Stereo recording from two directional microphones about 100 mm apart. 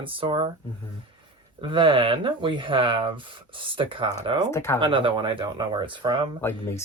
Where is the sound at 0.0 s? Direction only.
60° right (ahead or behind).